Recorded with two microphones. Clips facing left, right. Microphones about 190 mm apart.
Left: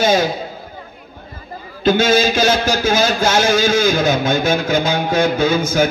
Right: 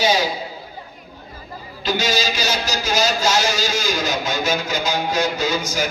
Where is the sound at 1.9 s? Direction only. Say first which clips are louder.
Left 8 dB; 55° left (ahead or behind).